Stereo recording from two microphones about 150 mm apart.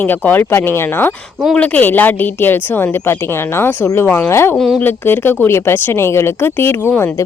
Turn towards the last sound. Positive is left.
turn(degrees=15)  # may be behind; listen again after turning